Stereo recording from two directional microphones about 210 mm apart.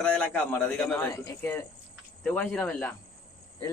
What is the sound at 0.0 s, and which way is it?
Speech, 5° left (ahead or behind).